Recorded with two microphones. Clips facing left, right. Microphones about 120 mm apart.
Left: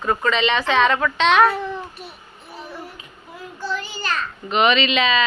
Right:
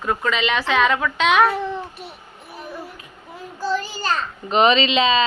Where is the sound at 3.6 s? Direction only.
40° right (ahead or behind).